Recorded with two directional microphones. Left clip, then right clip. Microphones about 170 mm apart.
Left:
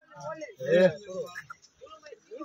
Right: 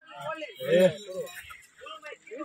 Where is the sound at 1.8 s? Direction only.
35° right (ahead or behind).